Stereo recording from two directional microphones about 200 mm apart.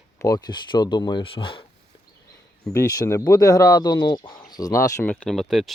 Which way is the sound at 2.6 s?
15° left (ahead or behind).